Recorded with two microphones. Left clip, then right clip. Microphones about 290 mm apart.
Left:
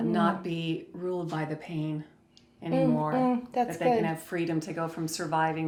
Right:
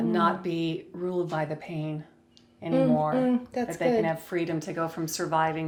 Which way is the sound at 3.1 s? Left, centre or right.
Centre.